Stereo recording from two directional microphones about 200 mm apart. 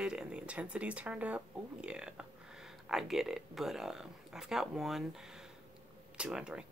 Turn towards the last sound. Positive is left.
turn(degrees=-5)  # may be behind; listen again after turning